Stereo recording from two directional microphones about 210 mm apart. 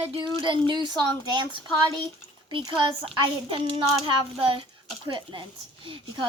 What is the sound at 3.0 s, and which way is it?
Speech, 25° right (ahead or behind).